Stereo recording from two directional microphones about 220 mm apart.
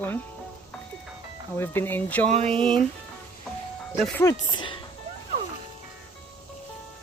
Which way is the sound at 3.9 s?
Centre (ahead or behind).